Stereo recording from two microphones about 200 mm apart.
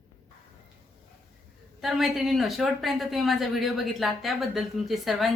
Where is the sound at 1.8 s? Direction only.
Centre (ahead or behind).